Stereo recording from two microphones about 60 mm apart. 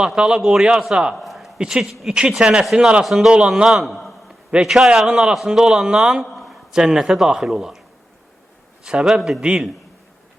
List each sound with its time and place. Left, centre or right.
0.0 s a man's voice: centre
1.1 s a sound: centre
1.5 s a man's voice: centre
3.0 s a man's voice: centre
3.9 s a sound: centre
4.5 s a man's voice: centre
6.3 s a sound: centre
6.7 s a man's voice: centre
8.8 s a man's voice: centre